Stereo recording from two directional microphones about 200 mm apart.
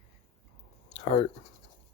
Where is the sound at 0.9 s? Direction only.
30° left (ahead or behind).